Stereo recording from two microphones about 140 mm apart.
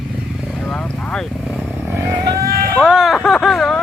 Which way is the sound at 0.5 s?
5° left (ahead or behind).